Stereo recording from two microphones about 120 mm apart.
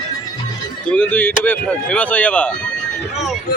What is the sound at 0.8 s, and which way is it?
Speech, 10° left (ahead or behind).